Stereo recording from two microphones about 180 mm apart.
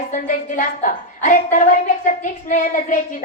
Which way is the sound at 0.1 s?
50° left (ahead or behind).